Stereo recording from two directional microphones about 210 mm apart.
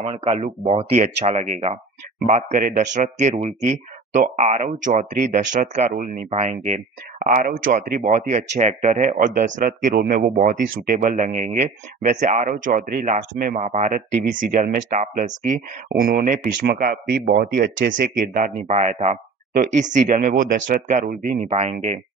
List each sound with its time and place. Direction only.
0.0 s speech: 25° right (ahead or behind)